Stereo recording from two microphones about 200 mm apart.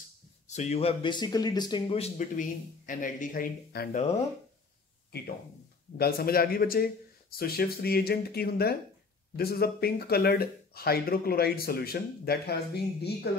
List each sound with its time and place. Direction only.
0.5 s a man's voice: 35° left (ahead or behind)
5.9 s speech: 50° left (ahead or behind)